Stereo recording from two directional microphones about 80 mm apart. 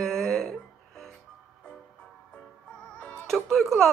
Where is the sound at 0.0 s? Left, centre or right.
Centre.